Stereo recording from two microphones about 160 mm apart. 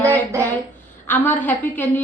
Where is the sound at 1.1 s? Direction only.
10° left (ahead or behind).